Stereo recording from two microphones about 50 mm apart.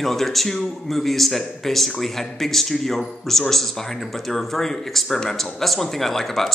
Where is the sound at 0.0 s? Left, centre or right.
Centre.